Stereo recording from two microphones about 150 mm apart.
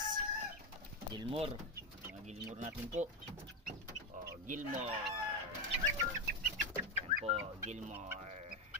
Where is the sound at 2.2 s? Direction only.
50° right (ahead or behind).